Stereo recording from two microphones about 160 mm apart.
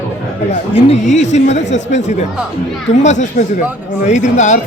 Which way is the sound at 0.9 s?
45° left (ahead or behind).